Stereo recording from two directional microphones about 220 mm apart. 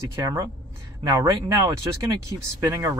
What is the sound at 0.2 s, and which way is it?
Speech, 15° right (ahead or behind).